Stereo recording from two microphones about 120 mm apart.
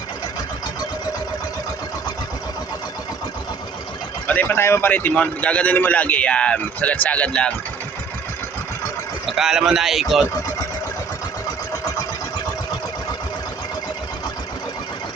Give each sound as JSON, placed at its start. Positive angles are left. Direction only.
{"t": 4.3, "sound": "a man's voice", "side_deg": 15}
{"t": 9.4, "sound": "speech", "side_deg": -5}